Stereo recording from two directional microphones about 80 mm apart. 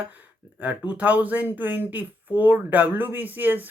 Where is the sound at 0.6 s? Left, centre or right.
Centre.